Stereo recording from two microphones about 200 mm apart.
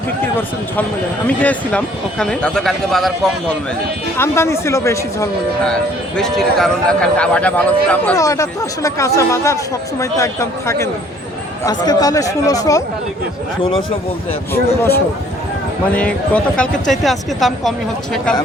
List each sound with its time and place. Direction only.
1.4 s speech: 5° left (ahead or behind)
4.2 s speech: 15° left (ahead or behind)
6.1 s speech: centre (ahead or behind)
11.6 s speech: 20° left (ahead or behind)
16.0 s speech: 5° left (ahead or behind)